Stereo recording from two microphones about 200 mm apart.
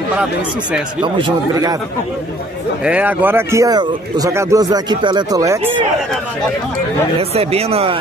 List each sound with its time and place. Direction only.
1.0 s speech: 20° right (ahead or behind)
2.8 s a man's voice: 5° right (ahead or behind)
7.2 s speech: 30° right (ahead or behind)